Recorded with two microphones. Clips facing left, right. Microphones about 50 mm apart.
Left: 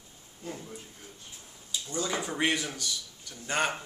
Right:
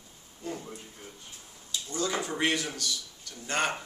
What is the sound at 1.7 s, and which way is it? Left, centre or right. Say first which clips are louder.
Speech: right 1 dB; centre.